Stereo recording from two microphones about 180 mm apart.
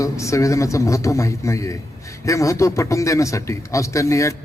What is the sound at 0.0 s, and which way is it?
A man's voice, 15° left (ahead or behind).